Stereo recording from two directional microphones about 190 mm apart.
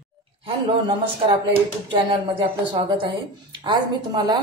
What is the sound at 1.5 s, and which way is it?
Speech, 25° right (ahead or behind).